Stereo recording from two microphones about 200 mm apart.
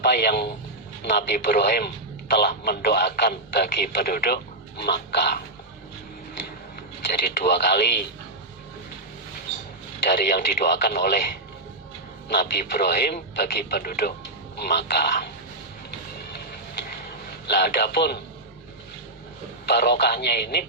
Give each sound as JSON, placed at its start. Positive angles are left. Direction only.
{"t": 0.0, "sound": "speech", "side_deg": 55}
{"t": 7.3, "sound": "speech", "side_deg": 55}
{"t": 10.1, "sound": "speech", "side_deg": 55}
{"t": 12.3, "sound": "speech", "side_deg": 55}
{"t": 17.4, "sound": "speech", "side_deg": 55}
{"t": 19.6, "sound": "speech", "side_deg": 55}